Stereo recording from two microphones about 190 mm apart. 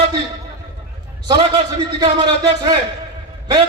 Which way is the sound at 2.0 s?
20° right (ahead or behind).